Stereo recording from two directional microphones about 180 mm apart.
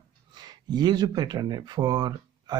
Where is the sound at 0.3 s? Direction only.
25° right (ahead or behind).